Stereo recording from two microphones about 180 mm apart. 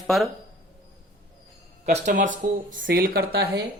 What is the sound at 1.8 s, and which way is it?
Speech, 40° right (ahead or behind).